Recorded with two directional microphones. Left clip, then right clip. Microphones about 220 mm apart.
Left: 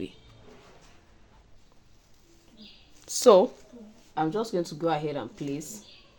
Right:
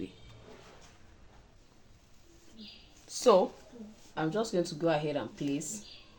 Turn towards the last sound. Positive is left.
turn(degrees=35)  # may be behind; listen again after turning